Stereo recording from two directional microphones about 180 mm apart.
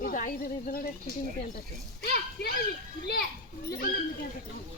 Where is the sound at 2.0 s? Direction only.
60° left (ahead or behind).